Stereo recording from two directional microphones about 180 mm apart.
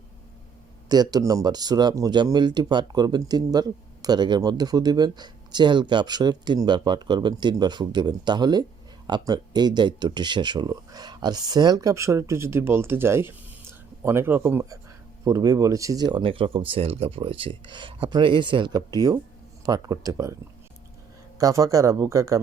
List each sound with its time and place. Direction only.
0.9 s speech: 20° right (ahead or behind)
21.3 s speech: 20° right (ahead or behind)